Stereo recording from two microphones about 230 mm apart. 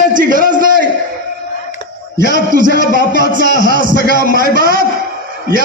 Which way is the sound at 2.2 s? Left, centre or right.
Right.